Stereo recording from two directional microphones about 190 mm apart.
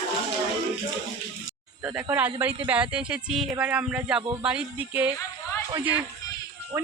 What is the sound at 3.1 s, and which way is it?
Speech, 5° right (ahead or behind).